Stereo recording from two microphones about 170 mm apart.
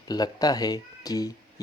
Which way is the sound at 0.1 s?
25° left (ahead or behind).